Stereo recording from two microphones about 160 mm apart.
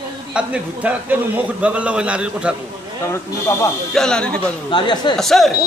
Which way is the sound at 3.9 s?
5° left (ahead or behind).